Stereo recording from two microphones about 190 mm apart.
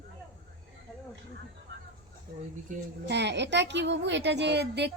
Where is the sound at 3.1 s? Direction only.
65° right (ahead or behind).